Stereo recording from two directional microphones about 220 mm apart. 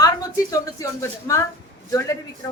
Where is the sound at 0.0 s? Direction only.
15° left (ahead or behind).